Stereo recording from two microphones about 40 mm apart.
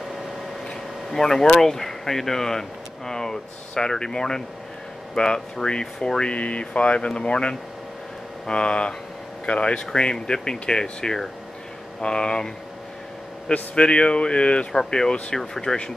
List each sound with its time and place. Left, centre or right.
1.1 s speech: centre
6.3 s speech: left
13.5 s speech: left